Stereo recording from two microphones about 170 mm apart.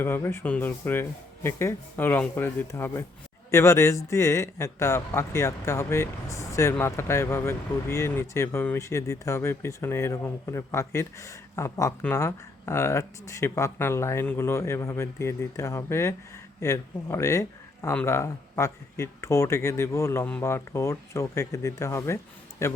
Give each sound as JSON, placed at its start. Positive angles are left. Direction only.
{"t": 0.0, "sound": "a man's voice", "side_deg": 15}